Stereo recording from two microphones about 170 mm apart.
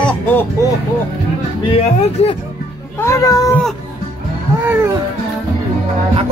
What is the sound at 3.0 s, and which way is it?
Speech, 20° left (ahead or behind).